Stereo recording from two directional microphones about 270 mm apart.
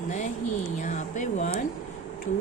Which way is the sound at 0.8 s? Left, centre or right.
Left.